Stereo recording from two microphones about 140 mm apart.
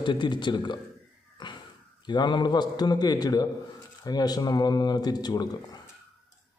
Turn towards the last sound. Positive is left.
turn(degrees=30)  # may be behind; listen again after turning